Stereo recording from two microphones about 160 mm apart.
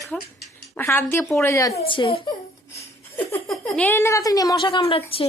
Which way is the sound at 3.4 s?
5° left (ahead or behind).